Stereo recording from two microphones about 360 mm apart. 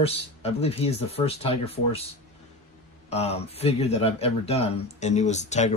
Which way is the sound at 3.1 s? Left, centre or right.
Centre.